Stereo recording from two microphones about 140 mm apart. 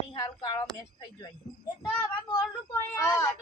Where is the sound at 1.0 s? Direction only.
30° left (ahead or behind).